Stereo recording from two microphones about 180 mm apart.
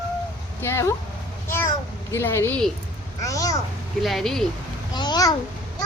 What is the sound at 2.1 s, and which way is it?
A child's voice, 15° left (ahead or behind).